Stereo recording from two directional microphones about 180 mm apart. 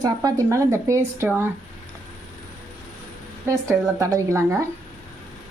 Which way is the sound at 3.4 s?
15° right (ahead or behind).